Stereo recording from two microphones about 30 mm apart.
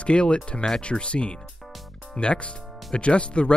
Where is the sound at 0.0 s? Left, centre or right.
Left.